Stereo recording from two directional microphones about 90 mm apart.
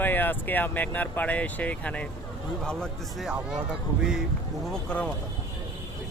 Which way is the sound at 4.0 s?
5° right (ahead or behind).